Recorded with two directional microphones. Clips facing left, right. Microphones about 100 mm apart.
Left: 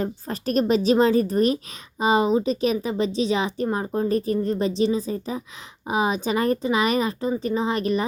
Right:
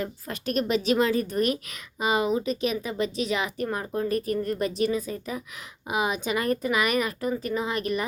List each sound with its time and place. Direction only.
0.0 s speech: 35° left (ahead or behind)